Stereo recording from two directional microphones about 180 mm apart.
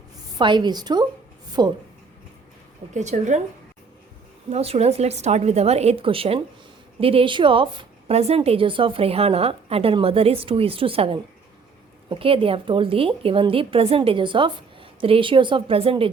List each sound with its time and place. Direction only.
0.3 s a woman's voice: 25° right (ahead or behind)
2.9 s a woman's voice: 40° right (ahead or behind)
4.4 s a woman's voice: 35° right (ahead or behind)